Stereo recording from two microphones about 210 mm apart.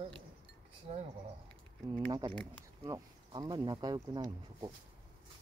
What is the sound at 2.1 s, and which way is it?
Speech, 20° right (ahead or behind).